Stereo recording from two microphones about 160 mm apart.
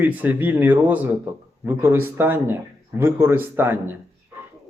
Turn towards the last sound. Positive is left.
turn(degrees=-15)  # may be behind; listen again after turning